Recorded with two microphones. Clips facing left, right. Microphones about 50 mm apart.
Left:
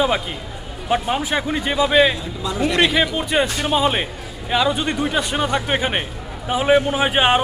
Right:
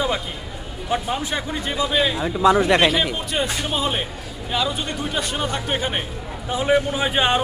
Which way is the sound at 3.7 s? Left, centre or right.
Left.